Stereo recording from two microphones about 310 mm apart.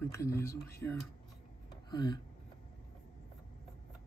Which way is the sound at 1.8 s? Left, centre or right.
Centre.